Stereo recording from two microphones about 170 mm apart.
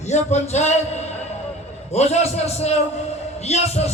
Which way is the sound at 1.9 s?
40° left (ahead or behind).